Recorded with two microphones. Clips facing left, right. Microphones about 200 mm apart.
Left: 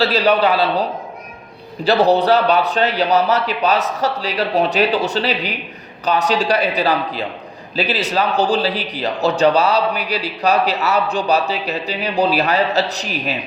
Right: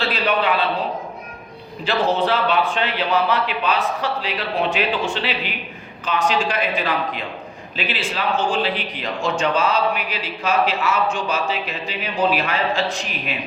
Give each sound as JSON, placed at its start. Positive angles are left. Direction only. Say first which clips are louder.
{"t": 0.0, "sound": "speech", "louder": "left 6 dB", "side_deg": 40}